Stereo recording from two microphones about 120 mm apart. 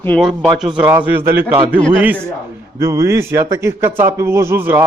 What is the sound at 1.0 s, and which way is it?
Speech, 15° right (ahead or behind).